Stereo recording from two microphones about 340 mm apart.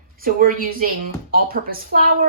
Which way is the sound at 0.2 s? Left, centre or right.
Right.